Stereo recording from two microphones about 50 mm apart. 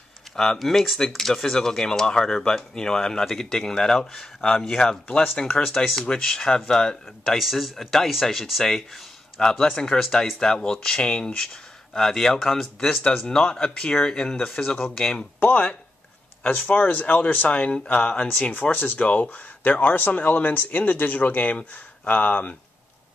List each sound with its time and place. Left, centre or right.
0.4 s speech: centre
5.0 s speech: left
7.3 s speech: centre
16.4 s speech: left
18.5 s speech: left